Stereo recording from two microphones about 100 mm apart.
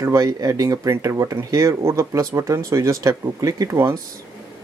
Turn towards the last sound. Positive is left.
turn(degrees=-35)  # may be behind; listen again after turning